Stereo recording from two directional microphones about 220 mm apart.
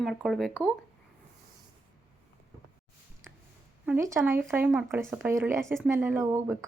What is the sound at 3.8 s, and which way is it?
Speech, 10° right (ahead or behind).